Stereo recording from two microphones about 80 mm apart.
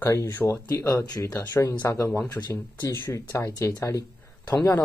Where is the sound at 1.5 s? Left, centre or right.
Left.